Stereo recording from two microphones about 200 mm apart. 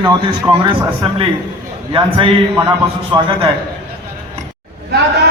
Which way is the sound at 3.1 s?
25° right (ahead or behind).